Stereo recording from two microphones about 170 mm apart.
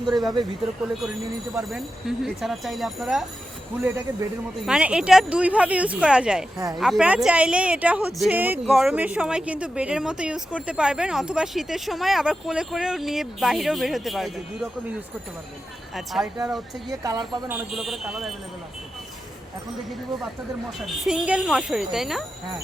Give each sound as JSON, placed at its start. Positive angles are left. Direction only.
{"t": 0.0, "sound": "a woman's voice", "side_deg": 0}
{"t": 1.5, "sound": "a woman's voice", "side_deg": -5}
{"t": 3.8, "sound": "a woman's voice", "side_deg": -15}
{"t": 16.0, "sound": "a woman's voice", "side_deg": 0}
{"t": 16.9, "sound": "a woman's voice", "side_deg": -20}
{"t": 17.5, "sound": "a woman's voice", "side_deg": -5}
{"t": 20.8, "sound": "a woman's voice", "side_deg": 0}